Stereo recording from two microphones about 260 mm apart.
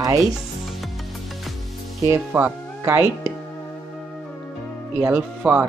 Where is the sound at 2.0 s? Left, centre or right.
Centre.